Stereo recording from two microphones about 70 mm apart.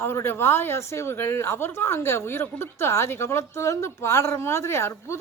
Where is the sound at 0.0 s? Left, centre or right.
Left.